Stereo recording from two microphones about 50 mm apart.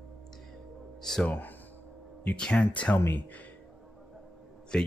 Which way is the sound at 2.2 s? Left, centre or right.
Left.